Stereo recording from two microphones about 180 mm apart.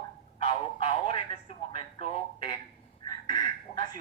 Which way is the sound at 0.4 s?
35° left (ahead or behind).